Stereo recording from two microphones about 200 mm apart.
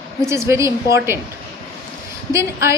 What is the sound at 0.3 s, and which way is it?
Speech, 15° right (ahead or behind).